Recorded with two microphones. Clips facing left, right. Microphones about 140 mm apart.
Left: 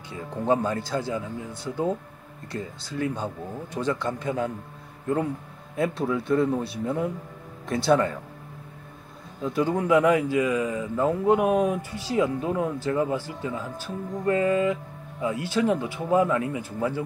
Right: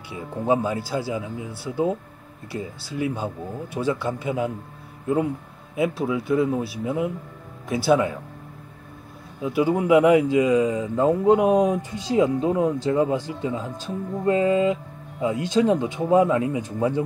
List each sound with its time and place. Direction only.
0.1 s speech: 10° right (ahead or behind)
9.4 s speech: 10° right (ahead or behind)